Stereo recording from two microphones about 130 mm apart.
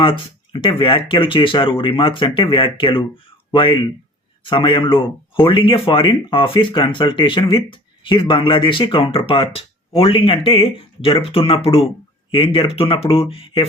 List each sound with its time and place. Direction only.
0.0 s speech: 40° left (ahead or behind)